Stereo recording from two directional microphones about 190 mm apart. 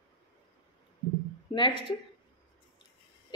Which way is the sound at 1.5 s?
25° left (ahead or behind).